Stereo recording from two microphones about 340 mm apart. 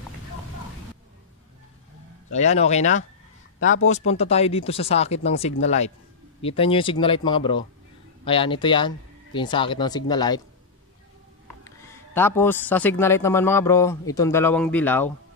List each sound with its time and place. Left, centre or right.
2.3 s a man's voice: centre
11.6 s a man's voice: centre